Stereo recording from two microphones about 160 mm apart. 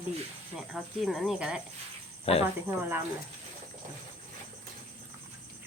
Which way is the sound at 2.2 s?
40° left (ahead or behind).